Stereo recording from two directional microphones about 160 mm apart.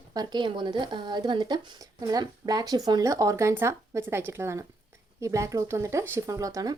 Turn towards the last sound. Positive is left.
turn(degrees=-20)  # may be behind; listen again after turning